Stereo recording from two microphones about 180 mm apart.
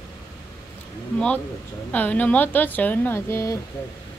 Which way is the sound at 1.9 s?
10° left (ahead or behind).